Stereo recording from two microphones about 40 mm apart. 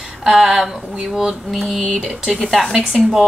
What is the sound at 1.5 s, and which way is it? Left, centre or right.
A woman's voice, centre.